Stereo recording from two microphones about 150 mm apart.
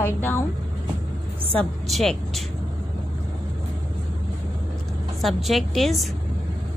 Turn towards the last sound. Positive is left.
turn(degrees=0)  # may be behind; listen again after turning